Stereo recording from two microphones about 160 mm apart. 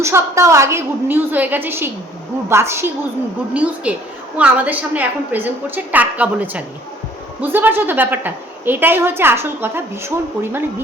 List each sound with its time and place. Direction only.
0.0 s a woman's voice: 15° right (ahead or behind)